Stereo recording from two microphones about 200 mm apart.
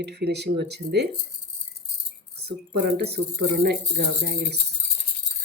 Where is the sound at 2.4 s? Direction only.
55° right (ahead or behind).